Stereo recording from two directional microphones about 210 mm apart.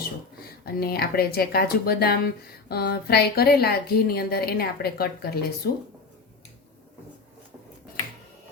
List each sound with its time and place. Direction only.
0.6 s speech: 45° left (ahead or behind)